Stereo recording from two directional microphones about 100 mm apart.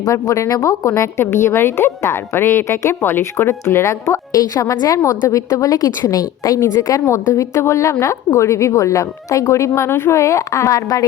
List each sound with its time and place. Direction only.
0.0 s a woman's voice: 35° left (ahead or behind)